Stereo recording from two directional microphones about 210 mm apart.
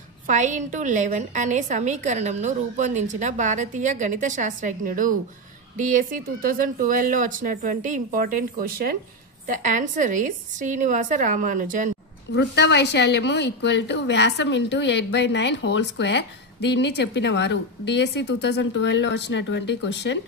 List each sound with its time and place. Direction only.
0.3 s a woman's voice: 35° right (ahead or behind)
12.3 s a woman's voice: 55° left (ahead or behind)